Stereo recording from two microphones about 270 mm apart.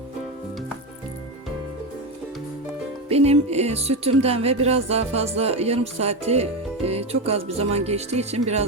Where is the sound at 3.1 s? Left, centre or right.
Right.